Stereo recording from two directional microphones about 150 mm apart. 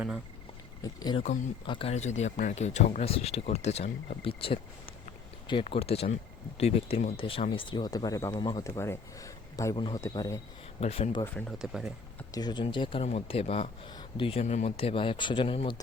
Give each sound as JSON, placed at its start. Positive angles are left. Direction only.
{"t": 0.8, "sound": "speech", "side_deg": 25}
{"t": 1.9, "sound": "speech", "side_deg": 50}
{"t": 4.2, "sound": "speech", "side_deg": 35}
{"t": 8.6, "sound": "speech", "side_deg": 20}
{"t": 9.7, "sound": "speech", "side_deg": 35}
{"t": 10.0, "sound": "speech", "side_deg": 20}
{"t": 10.8, "sound": "speech", "side_deg": 45}
{"t": 11.6, "sound": "speech", "side_deg": -5}
{"t": 12.3, "sound": "speech", "side_deg": 30}